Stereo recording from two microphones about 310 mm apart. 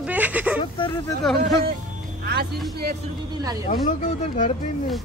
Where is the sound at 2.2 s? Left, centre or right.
Right.